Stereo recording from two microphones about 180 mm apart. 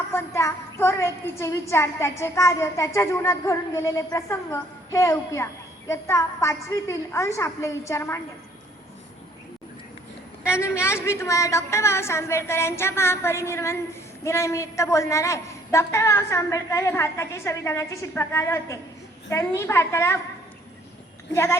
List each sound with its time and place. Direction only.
0.1 s a woman's voice: 15° left (ahead or behind)
10.4 s a woman's voice: 15° left (ahead or behind)
21.3 s a woman's voice: 15° left (ahead or behind)